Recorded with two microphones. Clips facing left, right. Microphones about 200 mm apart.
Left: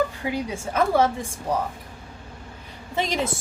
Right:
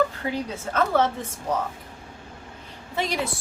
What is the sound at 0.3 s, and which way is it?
A woman's voice, 10° left (ahead or behind).